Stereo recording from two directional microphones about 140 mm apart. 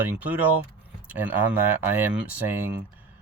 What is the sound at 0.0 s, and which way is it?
Speech, 10° right (ahead or behind).